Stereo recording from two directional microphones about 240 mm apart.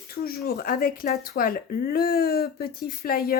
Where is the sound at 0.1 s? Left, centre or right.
Left.